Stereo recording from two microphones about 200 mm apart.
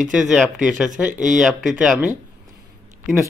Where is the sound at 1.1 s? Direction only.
40° right (ahead or behind).